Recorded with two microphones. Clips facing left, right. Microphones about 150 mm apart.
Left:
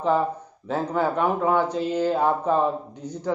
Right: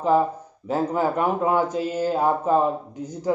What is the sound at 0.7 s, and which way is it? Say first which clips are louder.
Speech: right 1 dB; 5° right (ahead or behind).